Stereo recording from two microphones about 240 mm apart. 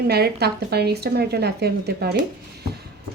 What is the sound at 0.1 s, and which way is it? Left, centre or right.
Speech, right.